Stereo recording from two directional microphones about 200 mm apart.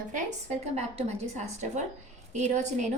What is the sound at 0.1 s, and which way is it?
A woman's voice, 40° right (ahead or behind).